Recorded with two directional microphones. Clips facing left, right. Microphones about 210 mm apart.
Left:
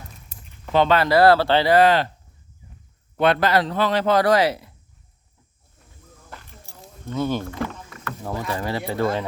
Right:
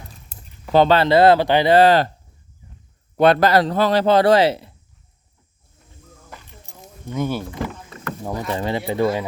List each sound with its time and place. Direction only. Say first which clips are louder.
0.7 s speech: right 3 dB; 35° right (ahead or behind); by 1.7 s 15° right (ahead or behind)
1.7 s a man's voice: right 3 dB; 35° right (ahead or behind)
3.2 s a man's voice: right 4 dB; 40° right (ahead or behind)
6.7 s vehicle: even; 15° right (ahead or behind)
7.9 s rowboat: right 4 dB; 30° right (ahead or behind)
8.2 s speech: right 2 dB; 15° right (ahead or behind)